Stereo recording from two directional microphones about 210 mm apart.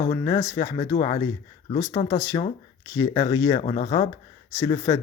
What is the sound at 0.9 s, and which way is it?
Speech, 25° left (ahead or behind).